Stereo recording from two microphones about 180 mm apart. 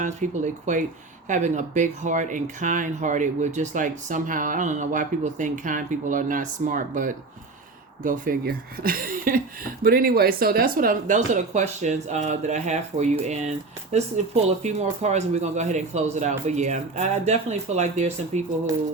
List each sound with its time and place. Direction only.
0.0 s speech: 45° right (ahead or behind)
14.4 s speech: 40° right (ahead or behind)